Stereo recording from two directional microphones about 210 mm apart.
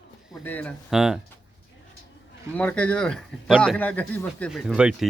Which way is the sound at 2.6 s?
5° left (ahead or behind).